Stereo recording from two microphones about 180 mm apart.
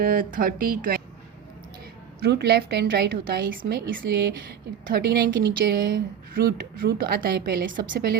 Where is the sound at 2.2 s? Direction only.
65° right (ahead or behind).